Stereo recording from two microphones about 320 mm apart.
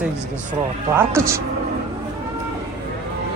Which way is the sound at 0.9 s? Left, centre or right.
Centre.